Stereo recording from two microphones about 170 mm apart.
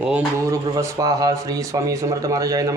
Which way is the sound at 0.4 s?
20° right (ahead or behind).